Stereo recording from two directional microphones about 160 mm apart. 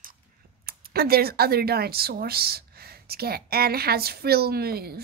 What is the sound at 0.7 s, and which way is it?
Speech, 75° right (ahead or behind).